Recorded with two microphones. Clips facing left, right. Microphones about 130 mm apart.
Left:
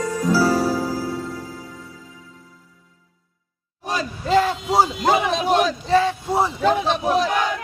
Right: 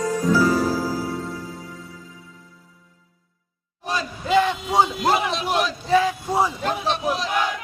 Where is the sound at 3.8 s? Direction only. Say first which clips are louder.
Left 1 dB; 40° left (ahead or behind).